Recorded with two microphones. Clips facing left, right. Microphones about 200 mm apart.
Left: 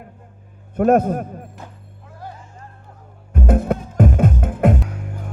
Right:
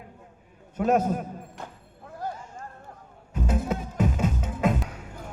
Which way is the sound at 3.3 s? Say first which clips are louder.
Left 8 dB; 55° left (ahead or behind).